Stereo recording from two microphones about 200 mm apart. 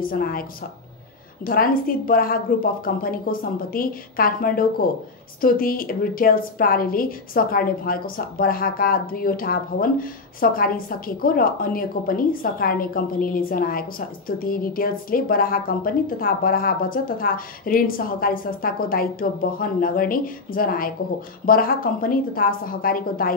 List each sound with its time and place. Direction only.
0.0 s a woman's voice: 45° left (ahead or behind)